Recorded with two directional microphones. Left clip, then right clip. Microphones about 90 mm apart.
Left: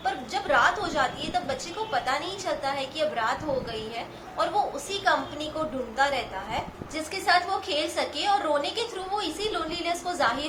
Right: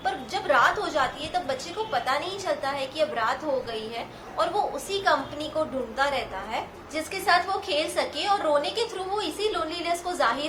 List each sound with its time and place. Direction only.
0.0 s a woman's voice: 40° right (ahead or behind)
4.4 s a woman's voice: 40° right (ahead or behind)